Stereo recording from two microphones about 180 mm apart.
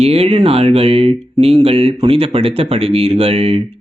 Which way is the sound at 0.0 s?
35° right (ahead or behind).